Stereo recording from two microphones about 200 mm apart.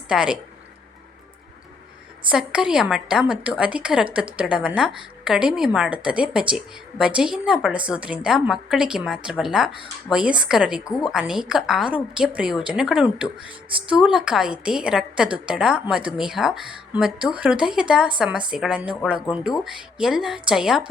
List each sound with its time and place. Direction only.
0.1 s a woman's voice: 5° right (ahead or behind)
2.3 s a woman's voice: 5° right (ahead or behind)